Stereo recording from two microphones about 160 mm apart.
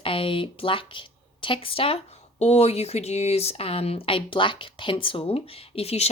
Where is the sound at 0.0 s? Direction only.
35° left (ahead or behind).